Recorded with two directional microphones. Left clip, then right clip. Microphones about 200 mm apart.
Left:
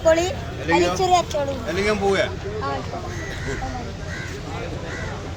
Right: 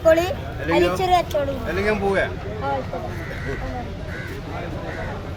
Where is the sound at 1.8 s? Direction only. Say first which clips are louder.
Left 1 dB; 25° left (ahead or behind).